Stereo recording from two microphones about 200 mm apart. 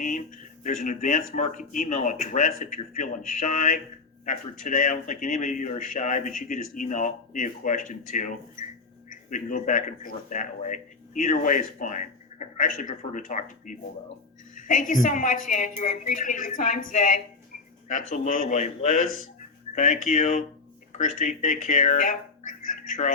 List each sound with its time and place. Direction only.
0.6 s speech: 40° left (ahead or behind)
14.5 s a sound: 40° left (ahead or behind)
15.0 s speech: 40° left (ahead or behind)